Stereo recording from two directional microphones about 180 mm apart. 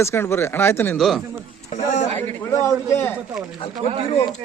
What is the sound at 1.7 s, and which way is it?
Speech, 40° left (ahead or behind).